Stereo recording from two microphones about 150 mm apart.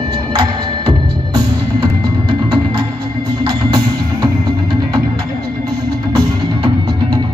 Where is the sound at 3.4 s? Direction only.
35° right (ahead or behind).